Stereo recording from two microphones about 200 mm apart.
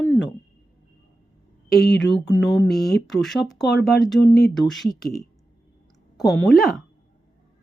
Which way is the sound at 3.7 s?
55° left (ahead or behind).